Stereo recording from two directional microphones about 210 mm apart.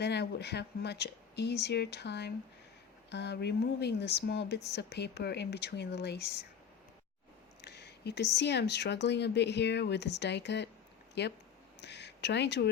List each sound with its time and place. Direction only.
0.0 s speech: 55° left (ahead or behind)
7.6 s speech: 55° left (ahead or behind)